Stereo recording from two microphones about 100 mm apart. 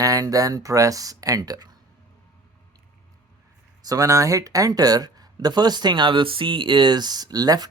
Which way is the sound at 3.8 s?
40° right (ahead or behind).